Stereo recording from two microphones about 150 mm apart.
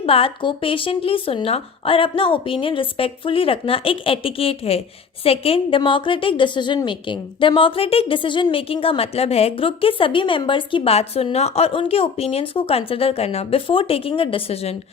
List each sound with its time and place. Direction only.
0.0 s a woman's voice: 40° left (ahead or behind)